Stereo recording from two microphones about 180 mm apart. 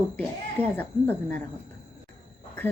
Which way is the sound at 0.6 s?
10° left (ahead or behind).